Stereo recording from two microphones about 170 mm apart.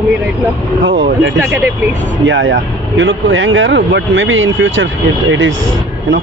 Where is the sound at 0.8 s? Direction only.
90° right.